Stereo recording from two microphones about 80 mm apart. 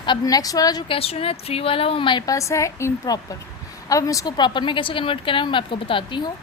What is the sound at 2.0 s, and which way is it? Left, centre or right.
Speech, left.